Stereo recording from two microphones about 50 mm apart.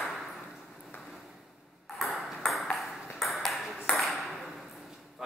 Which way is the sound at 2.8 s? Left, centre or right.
Centre.